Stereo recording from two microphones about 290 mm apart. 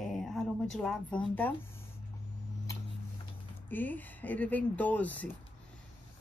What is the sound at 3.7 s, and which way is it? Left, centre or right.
Speech, centre.